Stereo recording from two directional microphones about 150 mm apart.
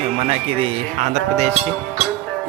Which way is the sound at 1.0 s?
50° right (ahead or behind).